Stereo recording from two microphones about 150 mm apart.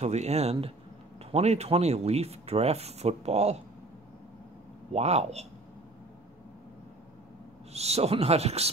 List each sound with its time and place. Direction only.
0.0 s speech: 45° right (ahead or behind)
4.9 s speech: 45° right (ahead or behind)
7.7 s speech: 45° right (ahead or behind)